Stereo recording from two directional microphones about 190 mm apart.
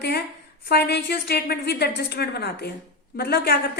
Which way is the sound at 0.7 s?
60° left (ahead or behind).